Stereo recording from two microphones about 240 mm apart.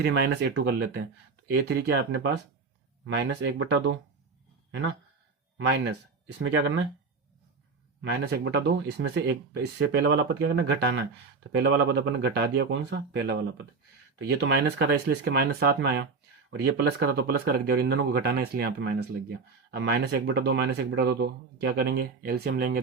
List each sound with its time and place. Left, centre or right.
0.0 s speech: right
5.5 s speech: right
8.3 s speech: right